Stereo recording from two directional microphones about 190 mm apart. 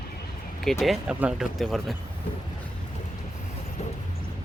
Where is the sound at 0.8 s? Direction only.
5° right (ahead or behind).